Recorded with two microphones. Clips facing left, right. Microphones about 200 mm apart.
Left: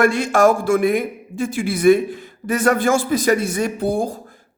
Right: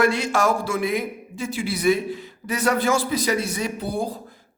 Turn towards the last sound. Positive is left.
turn(degrees=45)  # may be behind; listen again after turning